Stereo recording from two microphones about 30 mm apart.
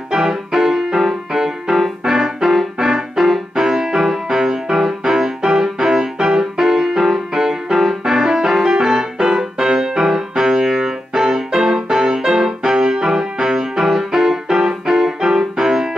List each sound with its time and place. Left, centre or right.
0.1 s music: centre